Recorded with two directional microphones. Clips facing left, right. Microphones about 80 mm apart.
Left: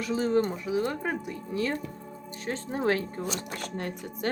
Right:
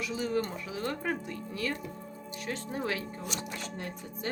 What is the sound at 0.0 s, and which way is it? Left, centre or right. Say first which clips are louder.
Speech: left 6 dB; left.